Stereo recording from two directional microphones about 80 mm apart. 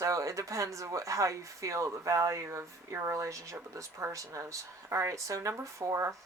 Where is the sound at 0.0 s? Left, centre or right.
Right.